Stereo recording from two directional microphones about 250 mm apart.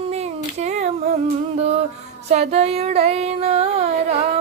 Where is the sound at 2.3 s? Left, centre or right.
Right.